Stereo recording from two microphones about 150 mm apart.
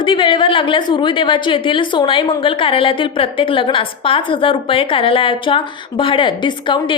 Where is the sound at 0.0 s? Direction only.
35° left (ahead or behind).